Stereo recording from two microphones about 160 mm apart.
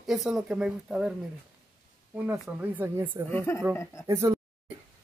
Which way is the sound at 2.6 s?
15° right (ahead or behind).